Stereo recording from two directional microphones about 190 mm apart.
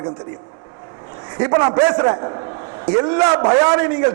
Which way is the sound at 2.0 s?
25° right (ahead or behind).